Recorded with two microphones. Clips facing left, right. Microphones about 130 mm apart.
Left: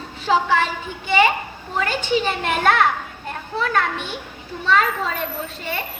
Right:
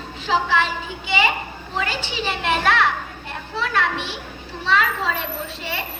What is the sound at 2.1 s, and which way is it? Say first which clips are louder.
A woman's voice: left 3 dB; 45° left (ahead or behind).